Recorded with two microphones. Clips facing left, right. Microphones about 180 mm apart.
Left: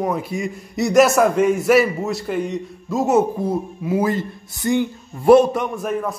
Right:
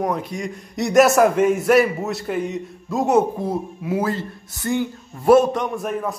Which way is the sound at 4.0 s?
15° left (ahead or behind).